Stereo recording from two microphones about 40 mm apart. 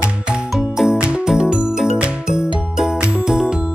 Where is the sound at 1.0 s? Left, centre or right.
Right.